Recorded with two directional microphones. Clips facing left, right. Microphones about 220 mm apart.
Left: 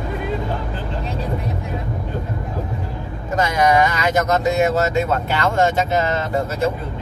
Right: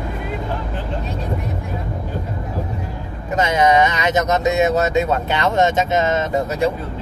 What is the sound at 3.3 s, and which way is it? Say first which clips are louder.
Speech: right 1 dB; 20° right (ahead or behind).